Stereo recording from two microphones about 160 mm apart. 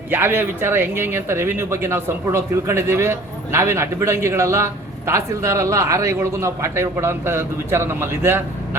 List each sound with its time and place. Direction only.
0.1 s speech: 15° right (ahead or behind)